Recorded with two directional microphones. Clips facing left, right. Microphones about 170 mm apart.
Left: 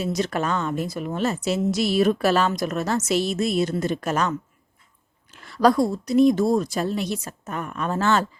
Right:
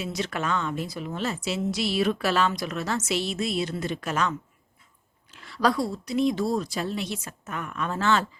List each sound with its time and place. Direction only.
0.0 s a woman's voice: 40° left (ahead or behind)